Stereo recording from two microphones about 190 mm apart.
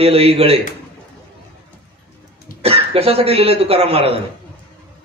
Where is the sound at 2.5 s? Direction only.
45° left (ahead or behind).